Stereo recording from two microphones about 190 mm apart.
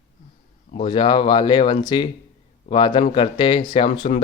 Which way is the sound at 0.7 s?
25° left (ahead or behind).